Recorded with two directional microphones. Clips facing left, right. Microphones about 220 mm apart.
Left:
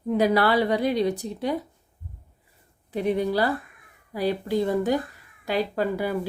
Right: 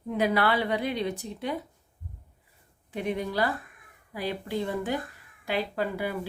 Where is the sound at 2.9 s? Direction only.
35° left (ahead or behind).